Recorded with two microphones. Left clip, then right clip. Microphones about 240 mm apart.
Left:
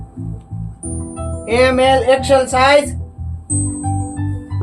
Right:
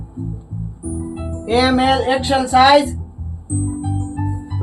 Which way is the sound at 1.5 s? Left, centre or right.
Left.